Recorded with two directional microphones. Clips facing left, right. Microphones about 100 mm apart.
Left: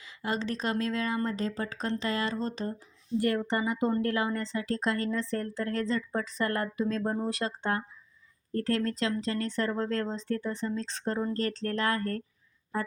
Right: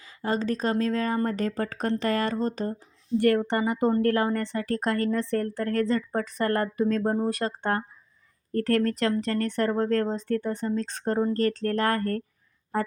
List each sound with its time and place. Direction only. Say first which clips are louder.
0.0 s speech: right 5 dB; 40° right (ahead or behind)
3.2 s a woman's voice: right 5 dB; 65° right (ahead or behind); by 7.9 s 45° right (ahead or behind)
8.5 s speech: right 5 dB; 60° right (ahead or behind)
12.7 s a woman's voice: right 5 dB; 60° right (ahead or behind)